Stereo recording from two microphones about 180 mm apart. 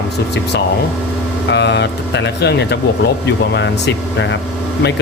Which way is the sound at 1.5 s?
70° left (ahead or behind).